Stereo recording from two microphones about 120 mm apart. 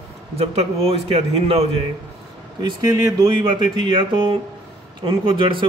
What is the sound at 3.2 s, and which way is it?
A man's voice, 40° right (ahead or behind).